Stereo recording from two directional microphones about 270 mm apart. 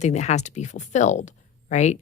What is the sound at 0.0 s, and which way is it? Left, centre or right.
Speech, left.